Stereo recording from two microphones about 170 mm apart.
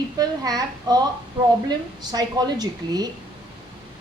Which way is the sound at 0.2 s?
25° right (ahead or behind).